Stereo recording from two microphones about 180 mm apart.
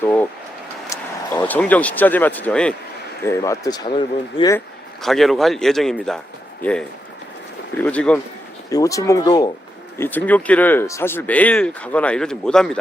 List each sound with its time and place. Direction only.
0.0 s a sound: 10° left (ahead or behind)
0.9 s speech: 10° left (ahead or behind)
3.2 s speech: 15° left (ahead or behind)
5.0 s speech: centre (ahead or behind)
8.7 s speech: 20° left (ahead or behind)
10.0 s speech: 10° left (ahead or behind)